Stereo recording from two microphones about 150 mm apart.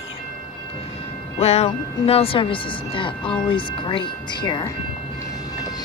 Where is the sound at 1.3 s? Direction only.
45° left (ahead or behind).